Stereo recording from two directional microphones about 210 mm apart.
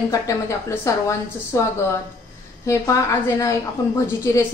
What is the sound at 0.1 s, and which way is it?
A woman's voice, 15° left (ahead or behind).